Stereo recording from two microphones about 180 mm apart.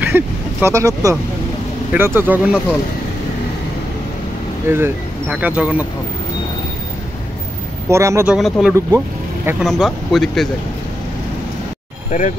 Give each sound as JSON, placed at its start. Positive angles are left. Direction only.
{"t": 0.0, "sound": "vehicle", "side_deg": -10}
{"t": 1.9, "sound": "speech", "side_deg": -10}
{"t": 4.7, "sound": "speech", "side_deg": -10}
{"t": 7.9, "sound": "speech", "side_deg": -15}
{"t": 8.3, "sound": "speech", "side_deg": 0}
{"t": 12.1, "sound": "speech", "side_deg": 45}